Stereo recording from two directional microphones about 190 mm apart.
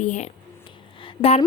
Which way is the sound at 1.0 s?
30° left (ahead or behind).